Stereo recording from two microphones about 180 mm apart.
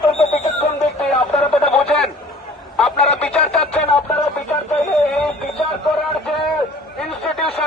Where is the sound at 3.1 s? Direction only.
5° left (ahead or behind).